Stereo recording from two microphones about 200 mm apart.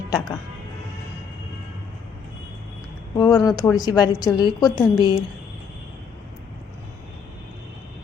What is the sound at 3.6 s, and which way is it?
A woman's voice, 20° left (ahead or behind).